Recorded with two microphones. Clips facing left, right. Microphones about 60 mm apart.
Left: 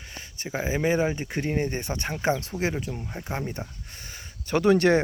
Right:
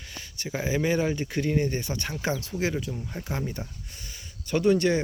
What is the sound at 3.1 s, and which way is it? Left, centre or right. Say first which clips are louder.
Speech: even; centre.